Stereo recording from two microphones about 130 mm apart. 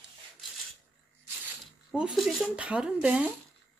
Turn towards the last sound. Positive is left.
turn(degrees=-10)  # may be behind; listen again after turning